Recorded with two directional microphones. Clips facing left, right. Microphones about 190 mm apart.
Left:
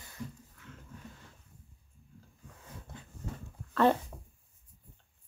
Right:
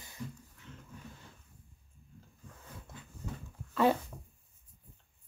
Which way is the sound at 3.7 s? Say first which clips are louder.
Left 2 dB; 5° right (ahead or behind).